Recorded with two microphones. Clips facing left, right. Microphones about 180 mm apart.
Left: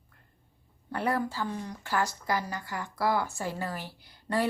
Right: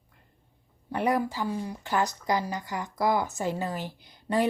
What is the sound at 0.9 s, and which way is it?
Speech, 15° right (ahead or behind).